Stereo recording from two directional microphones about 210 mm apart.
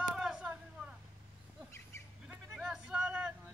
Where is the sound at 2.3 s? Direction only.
5° right (ahead or behind).